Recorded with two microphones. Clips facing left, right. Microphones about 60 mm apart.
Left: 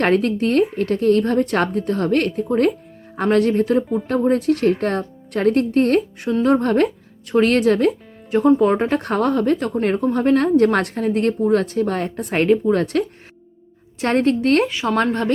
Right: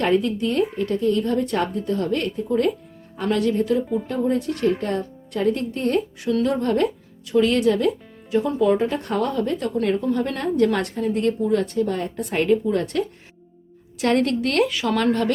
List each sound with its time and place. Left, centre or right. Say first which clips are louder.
0.0 s a woman's voice: left 3 dB; left
14.0 s a woman's voice: left 3 dB; left